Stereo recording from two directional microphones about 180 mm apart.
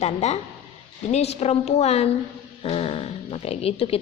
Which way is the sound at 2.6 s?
30° left (ahead or behind).